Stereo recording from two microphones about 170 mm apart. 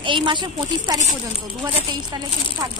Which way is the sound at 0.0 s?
30° right (ahead or behind).